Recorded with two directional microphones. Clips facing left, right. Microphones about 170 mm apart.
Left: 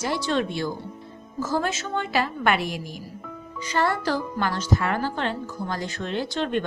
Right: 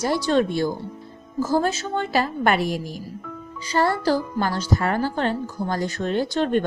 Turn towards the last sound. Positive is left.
turn(degrees=-45)  # may be behind; listen again after turning